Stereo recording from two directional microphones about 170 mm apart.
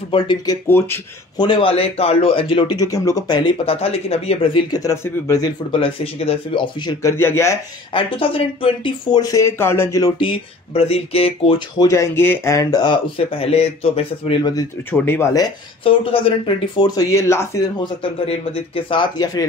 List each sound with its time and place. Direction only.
0.1 s speech: 30° left (ahead or behind)
0.7 s speech: 10° left (ahead or behind)
1.4 s speech: 30° left (ahead or behind)
2.8 s speech: 20° left (ahead or behind); by 4.5 s 35° left (ahead or behind)
4.6 s speech: 20° left (ahead or behind)
5.7 s speech: 35° left (ahead or behind)
7.0 s speech: 15° left (ahead or behind)
8.8 s speech: 25° left (ahead or behind)
11.9 s speech: 15° left (ahead or behind); by 14.5 s 35° left (ahead or behind)
14.5 s speech: 15° left (ahead or behind)
15.8 s speech: 30° left (ahead or behind); by 17.6 s 15° left (ahead or behind)
17.7 s speech: 35° left (ahead or behind)